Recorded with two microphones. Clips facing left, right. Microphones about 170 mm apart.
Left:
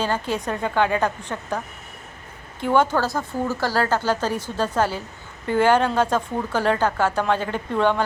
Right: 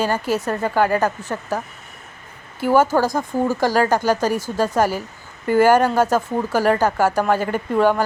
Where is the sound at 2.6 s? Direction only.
10° right (ahead or behind).